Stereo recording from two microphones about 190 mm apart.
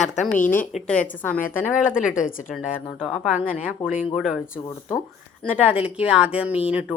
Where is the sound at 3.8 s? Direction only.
30° left (ahead or behind).